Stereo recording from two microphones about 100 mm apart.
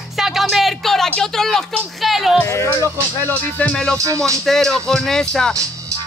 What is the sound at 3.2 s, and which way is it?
Music, 15° left (ahead or behind).